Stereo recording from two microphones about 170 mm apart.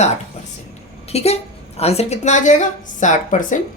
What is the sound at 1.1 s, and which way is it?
Speech, 40° left (ahead or behind).